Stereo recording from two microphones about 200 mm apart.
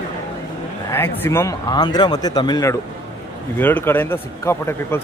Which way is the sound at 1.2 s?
15° left (ahead or behind).